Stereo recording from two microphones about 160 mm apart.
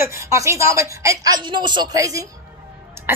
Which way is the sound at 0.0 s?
20° right (ahead or behind).